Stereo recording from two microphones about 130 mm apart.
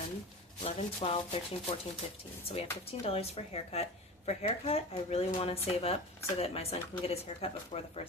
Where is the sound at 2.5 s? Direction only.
45° left (ahead or behind).